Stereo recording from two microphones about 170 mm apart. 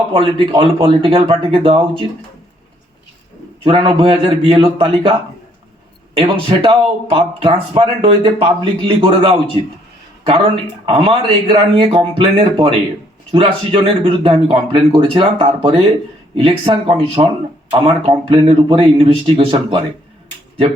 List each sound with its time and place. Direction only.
0.1 s speech: 30° right (ahead or behind)
3.6 s speech: 30° right (ahead or behind)
6.1 s speech: 30° right (ahead or behind)
10.8 s speech: 30° right (ahead or behind)